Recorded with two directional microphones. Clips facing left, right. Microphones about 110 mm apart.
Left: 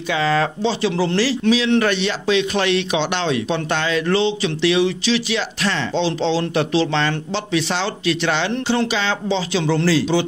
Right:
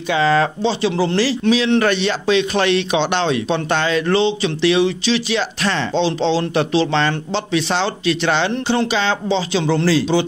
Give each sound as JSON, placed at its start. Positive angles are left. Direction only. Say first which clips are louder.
{"t": 0.1, "sound": "speech", "louder": "right 3 dB", "side_deg": -30}